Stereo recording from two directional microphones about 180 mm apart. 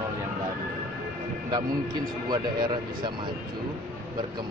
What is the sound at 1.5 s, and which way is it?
Speech, 20° right (ahead or behind).